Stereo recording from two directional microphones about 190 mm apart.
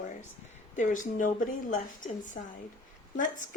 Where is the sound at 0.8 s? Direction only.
45° left (ahead or behind).